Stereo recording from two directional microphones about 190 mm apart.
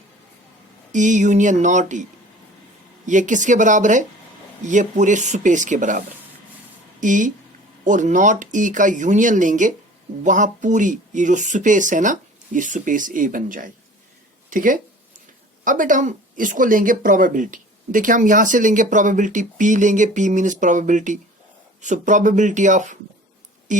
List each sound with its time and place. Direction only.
0.9 s speech: 40° right (ahead or behind)
3.1 s speech: 40° right (ahead or behind)
7.0 s speech: 40° right (ahead or behind)
14.5 s a sound: 45° right (ahead or behind)
15.6 s speech: 45° right (ahead or behind)